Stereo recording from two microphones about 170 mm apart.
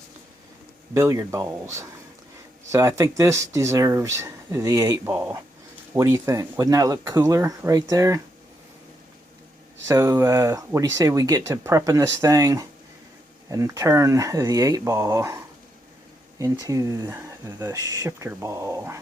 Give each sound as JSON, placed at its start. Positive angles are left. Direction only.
{"t": 0.9, "sound": "speech", "side_deg": -15}
{"t": 2.7, "sound": "speech", "side_deg": -15}
{"t": 9.8, "sound": "speech", "side_deg": -15}
{"t": 16.4, "sound": "speech", "side_deg": -20}